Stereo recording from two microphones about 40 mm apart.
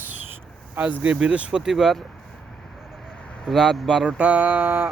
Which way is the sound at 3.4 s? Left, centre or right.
Centre.